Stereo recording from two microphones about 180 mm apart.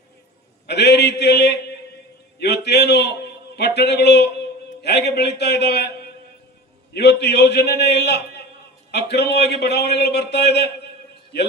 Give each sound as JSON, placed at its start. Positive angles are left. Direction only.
{"t": 0.7, "sound": "a man's voice", "side_deg": 70}